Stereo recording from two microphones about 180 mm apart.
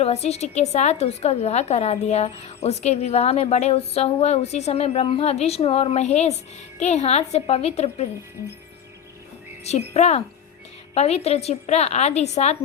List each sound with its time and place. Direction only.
0.0 s a woman's voice: 35° left (ahead or behind)
9.9 s a woman's voice: 35° left (ahead or behind)